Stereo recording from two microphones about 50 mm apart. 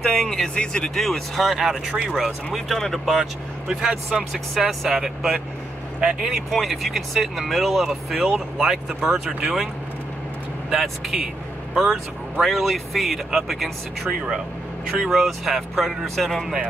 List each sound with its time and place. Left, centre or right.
0.2 s speech: centre
0.6 s speech: centre
3.6 s speech: centre
5.9 s speech: centre
6.5 s speech: centre
11.7 s speech: centre
15.0 s speech: centre